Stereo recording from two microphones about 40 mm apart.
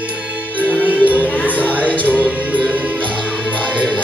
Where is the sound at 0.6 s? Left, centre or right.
Right.